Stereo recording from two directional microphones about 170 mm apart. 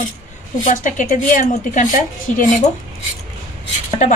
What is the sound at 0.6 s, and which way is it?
A woman's voice, 50° left (ahead or behind).